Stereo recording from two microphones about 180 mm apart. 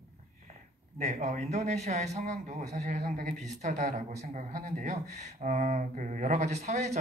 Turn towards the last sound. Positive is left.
turn(degrees=-40)  # may be behind; listen again after turning